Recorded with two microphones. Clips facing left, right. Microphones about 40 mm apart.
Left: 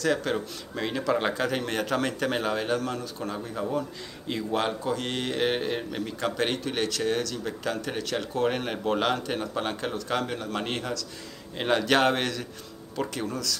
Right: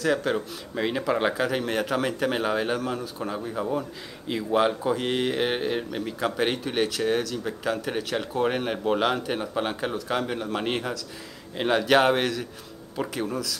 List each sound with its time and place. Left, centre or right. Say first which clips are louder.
0.0 s a man's voice: right 2 dB; centre